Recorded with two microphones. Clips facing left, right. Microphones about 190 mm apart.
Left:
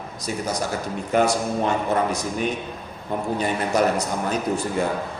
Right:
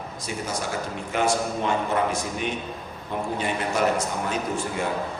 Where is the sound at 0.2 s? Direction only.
40° left (ahead or behind).